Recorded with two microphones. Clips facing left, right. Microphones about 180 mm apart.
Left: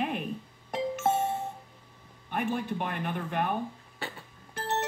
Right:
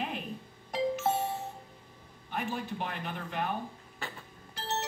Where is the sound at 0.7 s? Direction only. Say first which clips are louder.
Left 1 dB; 50° left (ahead or behind).